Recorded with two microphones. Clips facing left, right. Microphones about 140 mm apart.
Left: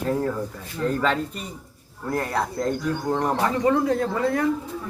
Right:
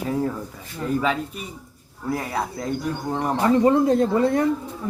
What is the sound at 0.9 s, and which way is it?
Speech, 5° right (ahead or behind).